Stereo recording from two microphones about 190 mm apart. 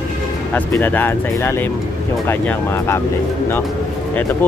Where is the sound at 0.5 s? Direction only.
10° left (ahead or behind).